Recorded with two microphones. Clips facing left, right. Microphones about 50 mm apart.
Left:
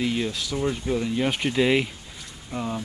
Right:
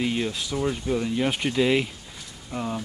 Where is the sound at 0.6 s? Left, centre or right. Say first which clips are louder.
Even; centre.